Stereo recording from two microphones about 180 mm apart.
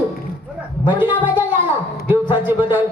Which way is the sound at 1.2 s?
10° right (ahead or behind).